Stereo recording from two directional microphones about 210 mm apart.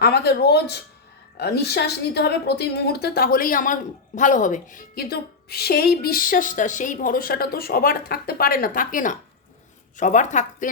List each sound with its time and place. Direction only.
0.0 s a woman's voice: 50° left (ahead or behind)